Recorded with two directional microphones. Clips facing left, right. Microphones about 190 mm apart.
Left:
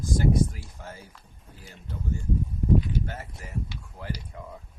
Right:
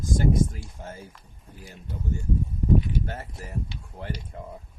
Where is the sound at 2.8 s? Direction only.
30° right (ahead or behind).